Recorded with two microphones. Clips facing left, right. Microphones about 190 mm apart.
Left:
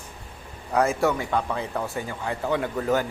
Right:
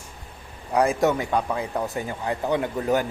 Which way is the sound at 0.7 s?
15° right (ahead or behind).